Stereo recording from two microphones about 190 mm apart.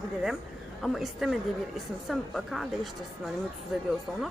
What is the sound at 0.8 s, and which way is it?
A woman's voice, centre (ahead or behind).